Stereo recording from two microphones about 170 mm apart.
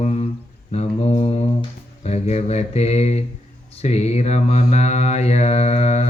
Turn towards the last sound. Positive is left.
turn(degrees=40)  # may be behind; listen again after turning